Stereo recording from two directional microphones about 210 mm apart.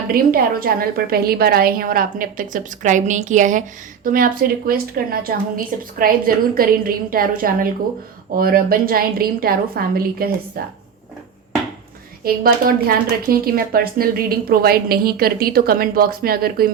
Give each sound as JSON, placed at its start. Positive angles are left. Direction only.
{"t": 0.1, "sound": "speech", "side_deg": -45}
{"t": 12.2, "sound": "speech", "side_deg": -45}